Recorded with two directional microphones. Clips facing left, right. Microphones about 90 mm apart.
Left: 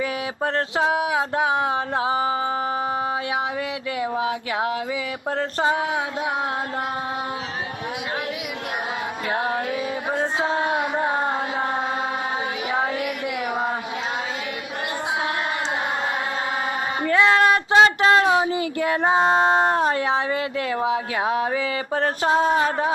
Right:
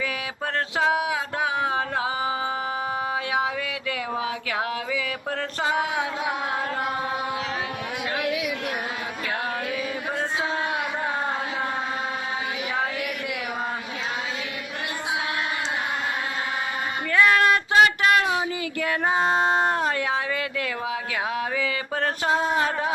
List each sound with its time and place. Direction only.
0.0 s speech: 30° left (ahead or behind)
4.2 s mantra: 30° left (ahead or behind)
10.1 s mantra: 30° left (ahead or behind)
17.1 s speech: 25° left (ahead or behind)